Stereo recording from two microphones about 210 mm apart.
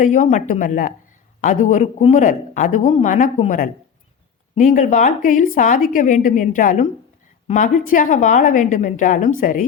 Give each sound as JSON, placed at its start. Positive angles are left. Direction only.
{"t": 0.0, "sound": "speech", "side_deg": 35}